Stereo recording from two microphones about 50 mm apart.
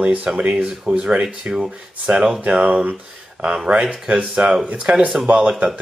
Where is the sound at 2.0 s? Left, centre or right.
Centre.